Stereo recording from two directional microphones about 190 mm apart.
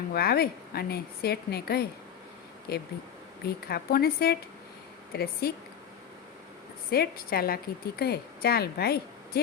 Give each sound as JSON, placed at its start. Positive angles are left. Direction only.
{"t": 0.1, "sound": "a woman's voice", "side_deg": 55}
{"t": 6.9, "sound": "a woman's voice", "side_deg": 55}